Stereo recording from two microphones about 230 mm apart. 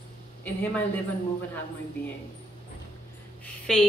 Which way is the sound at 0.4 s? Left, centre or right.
Centre.